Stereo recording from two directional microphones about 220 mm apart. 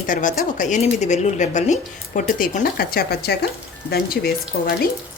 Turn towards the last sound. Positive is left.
turn(degrees=45)  # may be behind; listen again after turning